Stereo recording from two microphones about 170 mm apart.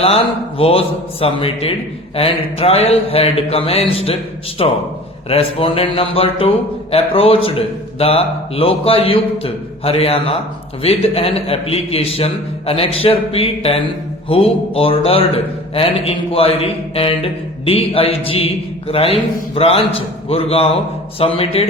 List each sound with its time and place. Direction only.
0.6 s a man's voice: 35° left (ahead or behind)